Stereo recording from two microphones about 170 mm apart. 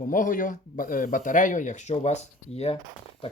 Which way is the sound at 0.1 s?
50° left (ahead or behind).